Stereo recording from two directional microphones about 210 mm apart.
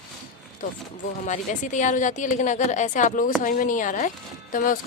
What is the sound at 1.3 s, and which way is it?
Speech, 35° left (ahead or behind).